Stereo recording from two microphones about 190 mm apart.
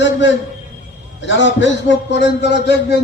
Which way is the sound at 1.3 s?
75° left (ahead or behind).